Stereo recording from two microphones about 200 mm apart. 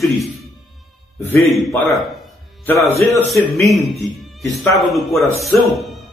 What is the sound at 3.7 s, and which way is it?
Speech, centre (ahead or behind).